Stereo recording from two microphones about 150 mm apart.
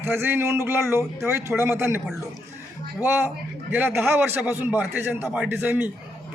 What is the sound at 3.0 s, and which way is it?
A man's voice, 15° right (ahead or behind).